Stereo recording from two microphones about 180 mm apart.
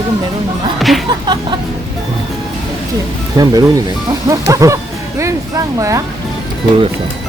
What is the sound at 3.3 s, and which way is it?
Speech, 20° right (ahead or behind).